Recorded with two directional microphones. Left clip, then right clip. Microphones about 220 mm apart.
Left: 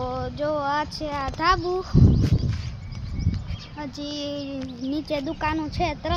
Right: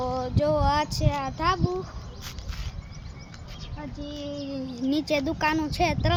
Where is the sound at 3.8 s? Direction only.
45° left (ahead or behind).